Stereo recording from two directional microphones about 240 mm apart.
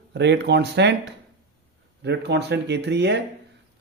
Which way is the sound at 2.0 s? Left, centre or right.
Right.